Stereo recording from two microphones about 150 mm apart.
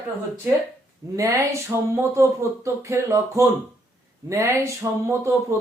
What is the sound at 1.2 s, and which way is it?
Speech, 20° right (ahead or behind).